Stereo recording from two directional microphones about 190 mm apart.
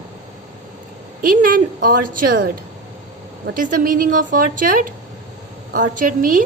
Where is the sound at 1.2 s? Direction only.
45° right (ahead or behind).